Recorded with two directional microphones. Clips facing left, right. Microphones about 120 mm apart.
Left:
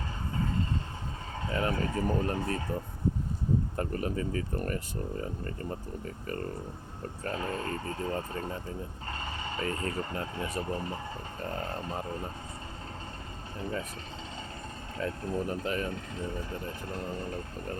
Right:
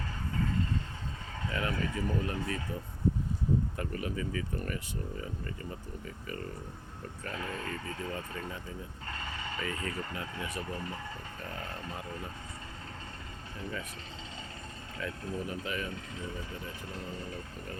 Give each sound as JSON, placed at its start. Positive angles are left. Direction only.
{"t": 1.5, "sound": "speech", "side_deg": 35}
{"t": 7.3, "sound": "speech", "side_deg": 35}
{"t": 13.6, "sound": "speech", "side_deg": 35}
{"t": 14.9, "sound": "speech", "side_deg": 40}